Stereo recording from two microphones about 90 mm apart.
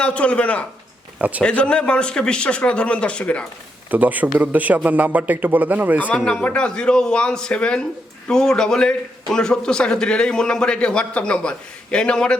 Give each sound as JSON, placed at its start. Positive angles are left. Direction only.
{"t": 0.0, "sound": "a man's voice", "side_deg": 15}
{"t": 3.9, "sound": "a man's voice", "side_deg": -20}
{"t": 6.1, "sound": "a man's voice", "side_deg": 10}